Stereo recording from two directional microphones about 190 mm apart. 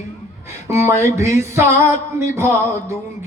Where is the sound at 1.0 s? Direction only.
15° right (ahead or behind).